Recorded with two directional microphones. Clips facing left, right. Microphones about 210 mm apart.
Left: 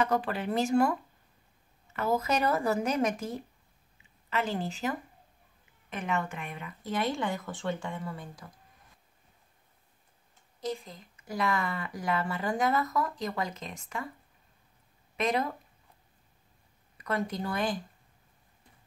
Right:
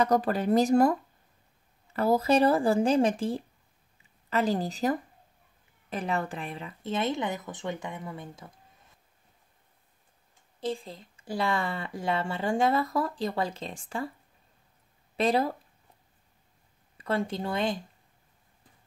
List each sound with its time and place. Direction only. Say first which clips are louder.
0.0 s speech: right 4 dB; 40° right (ahead or behind)
2.0 s speech: right 6 dB; 35° right (ahead or behind)
10.6 s speech: right 3 dB; 30° right (ahead or behind)
15.1 s speech: right 4 dB; 30° right (ahead or behind)
16.9 s speech: right 3 dB; 30° right (ahead or behind)